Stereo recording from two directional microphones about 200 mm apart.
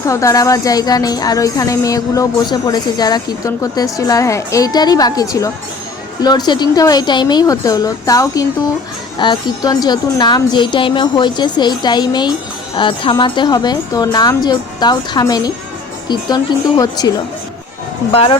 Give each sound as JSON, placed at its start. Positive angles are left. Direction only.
{"t": 0.0, "sound": "a woman's voice", "side_deg": 15}
{"t": 18.1, "sound": "a woman's voice", "side_deg": 30}